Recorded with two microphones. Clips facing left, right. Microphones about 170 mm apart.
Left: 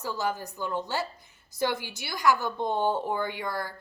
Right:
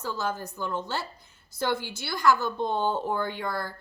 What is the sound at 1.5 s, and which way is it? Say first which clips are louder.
A woman's voice: even; 15° left (ahead or behind).